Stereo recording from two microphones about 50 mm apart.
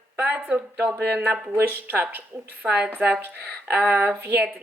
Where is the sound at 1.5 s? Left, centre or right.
Right.